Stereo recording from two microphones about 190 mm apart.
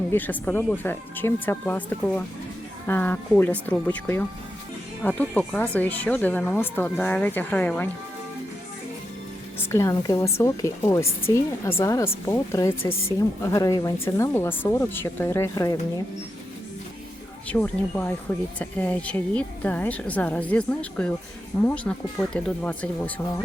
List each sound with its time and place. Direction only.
0.1 s a woman's voice: 10° left (ahead or behind)
9.6 s a woman's voice: 15° left (ahead or behind)
17.5 s a woman's voice: 10° left (ahead or behind)